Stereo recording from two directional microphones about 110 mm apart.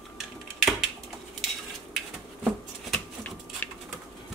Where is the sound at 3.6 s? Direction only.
15° left (ahead or behind).